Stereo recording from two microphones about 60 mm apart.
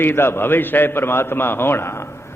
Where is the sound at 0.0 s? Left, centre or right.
Left.